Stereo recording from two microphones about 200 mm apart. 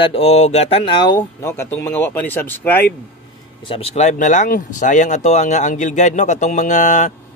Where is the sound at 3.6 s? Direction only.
30° left (ahead or behind).